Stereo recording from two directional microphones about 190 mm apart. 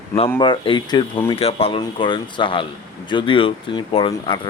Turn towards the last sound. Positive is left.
turn(degrees=25)  # may be behind; listen again after turning